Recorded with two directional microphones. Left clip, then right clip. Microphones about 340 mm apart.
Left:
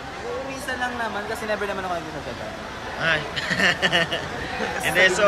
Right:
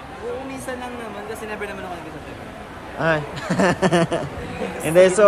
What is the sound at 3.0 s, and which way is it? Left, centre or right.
Speech, centre.